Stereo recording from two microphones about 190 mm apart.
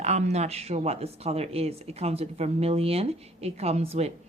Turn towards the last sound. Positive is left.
turn(degrees=-35)  # may be behind; listen again after turning